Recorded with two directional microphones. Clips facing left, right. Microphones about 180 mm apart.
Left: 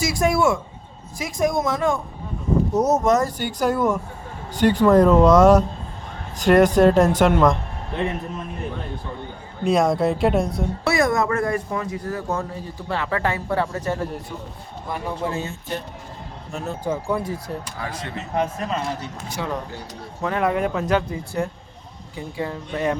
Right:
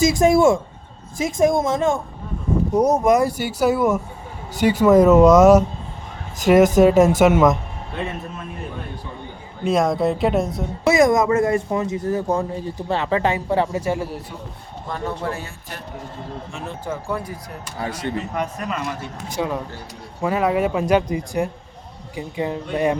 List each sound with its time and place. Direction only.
0.0 s speech: 25° right (ahead or behind)
2.7 s speech: 10° right (ahead or behind)
9.6 s speech: centre (ahead or behind)
10.8 s speech: 20° right (ahead or behind)
14.8 s a man's voice: 10° left (ahead or behind)
16.5 s speech: 40° left (ahead or behind)
16.8 s a man's voice: 10° left (ahead or behind)
17.7 s speech: 30° right (ahead or behind)
18.2 s speech: 25° left (ahead or behind)
19.4 s speech: 20° right (ahead or behind)
20.2 s speech: 5° right (ahead or behind)